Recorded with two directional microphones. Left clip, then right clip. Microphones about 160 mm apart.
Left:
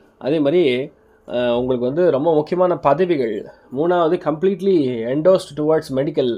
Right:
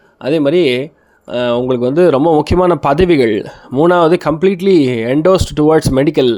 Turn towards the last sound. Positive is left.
turn(degrees=-30)  # may be behind; listen again after turning